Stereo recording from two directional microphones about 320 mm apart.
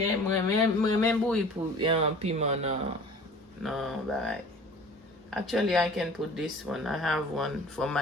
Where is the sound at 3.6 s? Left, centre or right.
Centre.